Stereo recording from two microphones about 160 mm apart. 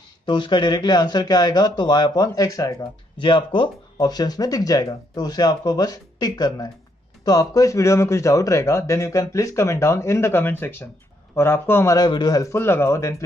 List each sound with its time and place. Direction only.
0.3 s a man's voice: 30° left (ahead or behind)